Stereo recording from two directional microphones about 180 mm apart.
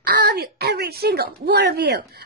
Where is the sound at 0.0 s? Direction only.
60° right (ahead or behind).